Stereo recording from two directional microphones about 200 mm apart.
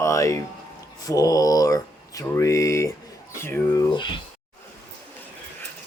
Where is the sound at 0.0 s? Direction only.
15° left (ahead or behind).